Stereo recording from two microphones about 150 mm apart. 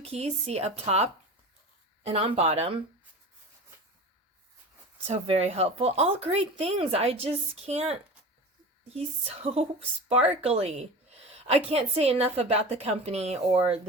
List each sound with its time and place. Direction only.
0.0 s a woman's voice: 45° right (ahead or behind)
5.0 s a woman's voice: 45° right (ahead or behind)